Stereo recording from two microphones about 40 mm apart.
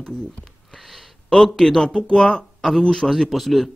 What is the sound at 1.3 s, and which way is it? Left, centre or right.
Speech, centre.